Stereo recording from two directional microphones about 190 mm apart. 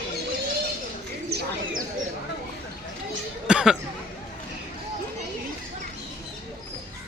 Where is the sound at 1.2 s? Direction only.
60° right (ahead or behind).